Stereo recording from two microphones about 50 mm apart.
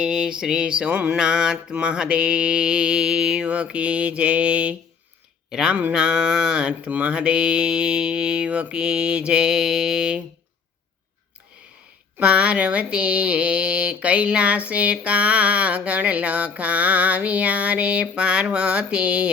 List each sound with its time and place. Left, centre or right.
0.0 s mantra: centre
0.9 s a sound: right
1.1 s speech: centre
5.5 s speech: centre
5.9 s mantra: centre
12.2 s speech: right